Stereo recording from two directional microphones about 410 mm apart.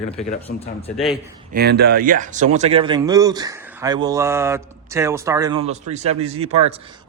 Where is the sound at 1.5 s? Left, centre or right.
Right.